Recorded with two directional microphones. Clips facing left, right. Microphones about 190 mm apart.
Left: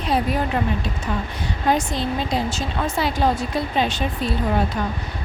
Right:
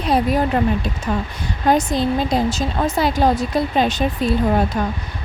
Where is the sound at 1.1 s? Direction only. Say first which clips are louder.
Right 4 dB; 45° right (ahead or behind).